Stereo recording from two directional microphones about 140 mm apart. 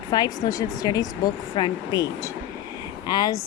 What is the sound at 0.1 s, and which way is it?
Speech, 30° left (ahead or behind).